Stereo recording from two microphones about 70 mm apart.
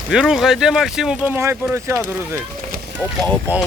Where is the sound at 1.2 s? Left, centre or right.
Right.